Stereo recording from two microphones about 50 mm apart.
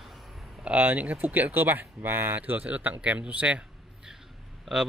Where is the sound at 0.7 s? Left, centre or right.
Right.